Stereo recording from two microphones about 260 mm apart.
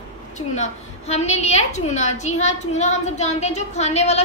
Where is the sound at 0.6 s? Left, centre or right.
Left.